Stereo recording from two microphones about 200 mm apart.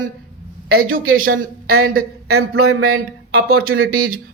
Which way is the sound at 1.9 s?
50° right (ahead or behind).